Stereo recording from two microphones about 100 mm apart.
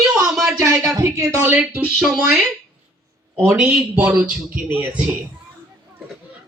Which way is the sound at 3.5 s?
10° right (ahead or behind).